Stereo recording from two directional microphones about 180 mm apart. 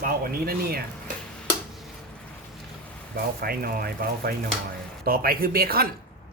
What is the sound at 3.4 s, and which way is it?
Speech, 55° right (ahead or behind).